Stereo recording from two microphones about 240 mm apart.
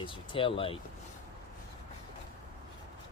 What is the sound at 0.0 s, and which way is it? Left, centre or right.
Speech, left.